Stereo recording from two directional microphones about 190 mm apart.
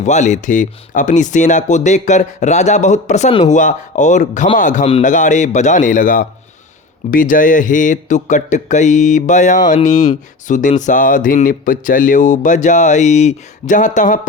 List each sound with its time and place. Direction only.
0.0 s speech: 40° left (ahead or behind)